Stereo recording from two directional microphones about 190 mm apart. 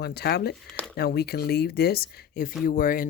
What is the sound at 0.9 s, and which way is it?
Speech, 55° left (ahead or behind).